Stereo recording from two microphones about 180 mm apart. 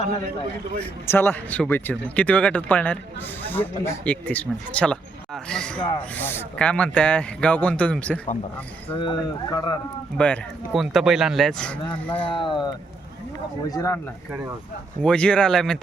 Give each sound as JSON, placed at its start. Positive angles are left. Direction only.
{"t": 0.8, "sound": "speech", "side_deg": 10}
{"t": 8.9, "sound": "speech", "side_deg": 25}
{"t": 10.2, "sound": "speech", "side_deg": 5}
{"t": 12.3, "sound": "speech", "side_deg": 25}
{"t": 13.7, "sound": "speech", "side_deg": 20}
{"t": 15.0, "sound": "speech", "side_deg": 5}